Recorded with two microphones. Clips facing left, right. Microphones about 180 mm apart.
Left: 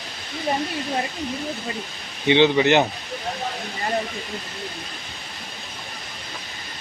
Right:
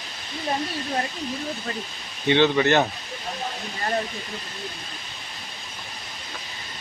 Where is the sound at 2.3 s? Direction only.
15° left (ahead or behind).